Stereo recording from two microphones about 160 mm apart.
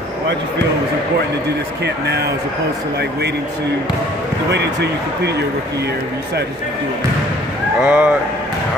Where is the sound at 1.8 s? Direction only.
90° right.